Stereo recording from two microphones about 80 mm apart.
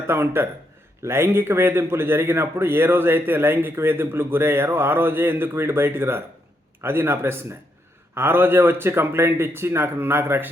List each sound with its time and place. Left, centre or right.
0.1 s a man's voice: right